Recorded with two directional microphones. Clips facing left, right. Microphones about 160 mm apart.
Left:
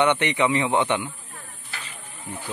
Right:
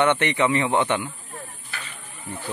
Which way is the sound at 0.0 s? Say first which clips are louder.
Even; 15° left (ahead or behind).